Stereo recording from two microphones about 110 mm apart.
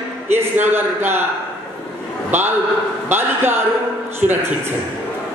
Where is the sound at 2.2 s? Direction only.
20° right (ahead or behind).